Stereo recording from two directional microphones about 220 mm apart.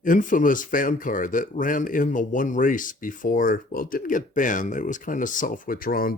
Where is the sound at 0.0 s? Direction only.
35° left (ahead or behind).